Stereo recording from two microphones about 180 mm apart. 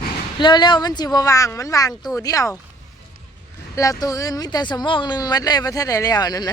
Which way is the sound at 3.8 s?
20° left (ahead or behind).